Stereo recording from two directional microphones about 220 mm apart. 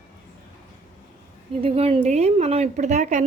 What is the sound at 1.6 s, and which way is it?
A woman's voice, 25° right (ahead or behind).